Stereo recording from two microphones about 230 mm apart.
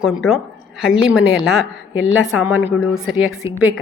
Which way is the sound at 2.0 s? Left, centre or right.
Left.